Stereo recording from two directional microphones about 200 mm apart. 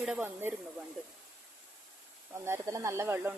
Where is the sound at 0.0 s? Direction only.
5° right (ahead or behind).